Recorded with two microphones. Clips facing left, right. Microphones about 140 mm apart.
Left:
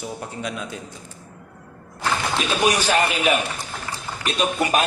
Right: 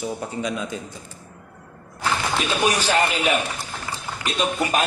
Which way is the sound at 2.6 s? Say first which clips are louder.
Left 1 dB; 10° left (ahead or behind).